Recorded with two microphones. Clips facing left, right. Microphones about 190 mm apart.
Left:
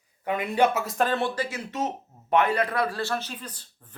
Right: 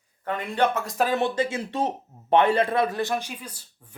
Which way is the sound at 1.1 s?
20° right (ahead or behind).